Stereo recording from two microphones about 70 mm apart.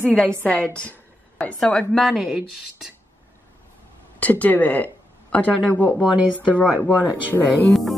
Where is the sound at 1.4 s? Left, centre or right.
Centre.